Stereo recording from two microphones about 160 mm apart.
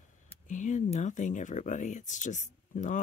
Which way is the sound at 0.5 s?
50° left (ahead or behind).